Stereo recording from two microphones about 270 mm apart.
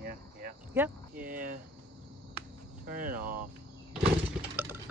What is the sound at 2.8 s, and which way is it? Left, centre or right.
Speech, right.